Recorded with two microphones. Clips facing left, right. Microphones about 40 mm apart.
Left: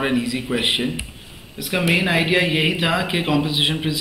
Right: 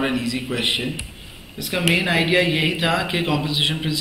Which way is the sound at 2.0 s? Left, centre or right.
Centre.